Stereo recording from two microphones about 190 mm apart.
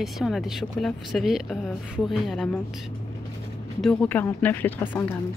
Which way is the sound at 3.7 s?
5° left (ahead or behind).